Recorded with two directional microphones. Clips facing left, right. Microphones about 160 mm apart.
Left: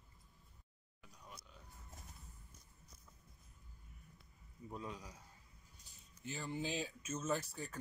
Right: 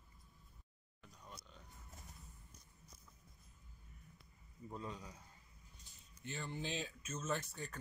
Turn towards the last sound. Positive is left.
turn(degrees=10)  # may be behind; listen again after turning